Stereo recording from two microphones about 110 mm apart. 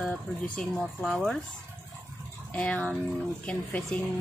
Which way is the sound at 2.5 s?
15° left (ahead or behind).